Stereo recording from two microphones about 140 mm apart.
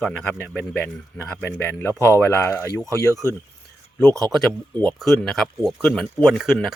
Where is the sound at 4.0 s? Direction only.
5° left (ahead or behind).